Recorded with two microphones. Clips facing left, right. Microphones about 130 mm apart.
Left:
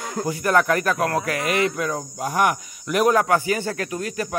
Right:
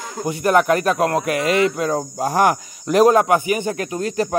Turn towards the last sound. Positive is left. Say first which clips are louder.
# right 6 dB
turn(degrees=-30)  # may be behind; listen again after turning